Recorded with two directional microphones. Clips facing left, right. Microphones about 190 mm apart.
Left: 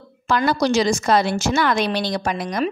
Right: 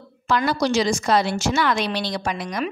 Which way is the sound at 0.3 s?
45° left (ahead or behind).